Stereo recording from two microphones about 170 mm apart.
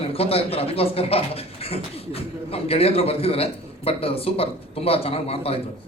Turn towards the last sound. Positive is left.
turn(degrees=35)  # may be behind; listen again after turning